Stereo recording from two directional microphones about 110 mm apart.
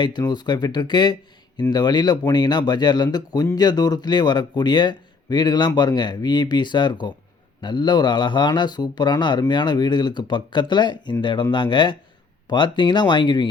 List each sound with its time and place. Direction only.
0.0 s speech: 40° left (ahead or behind)